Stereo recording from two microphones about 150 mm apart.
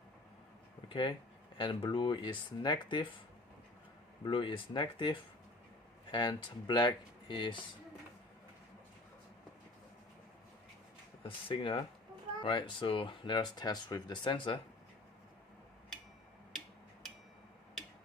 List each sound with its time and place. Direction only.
0.9 s speech: 35° left (ahead or behind)
4.2 s speech: 35° left (ahead or behind)
11.2 s speech: 35° left (ahead or behind)